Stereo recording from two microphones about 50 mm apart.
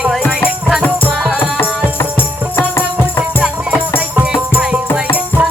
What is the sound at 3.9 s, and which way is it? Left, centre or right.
Music, right.